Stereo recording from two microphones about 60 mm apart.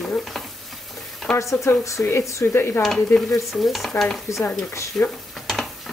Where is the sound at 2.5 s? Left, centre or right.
Left.